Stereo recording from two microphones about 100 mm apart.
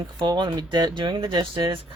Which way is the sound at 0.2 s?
50° right (ahead or behind).